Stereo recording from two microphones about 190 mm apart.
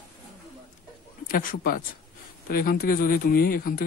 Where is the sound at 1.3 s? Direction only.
50° left (ahead or behind).